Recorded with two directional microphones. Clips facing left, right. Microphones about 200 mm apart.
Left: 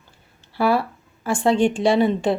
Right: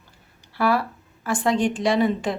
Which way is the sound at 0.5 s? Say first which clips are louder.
Left 2 dB; 30° left (ahead or behind).